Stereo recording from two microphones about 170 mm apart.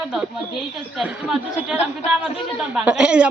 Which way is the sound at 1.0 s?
5° right (ahead or behind).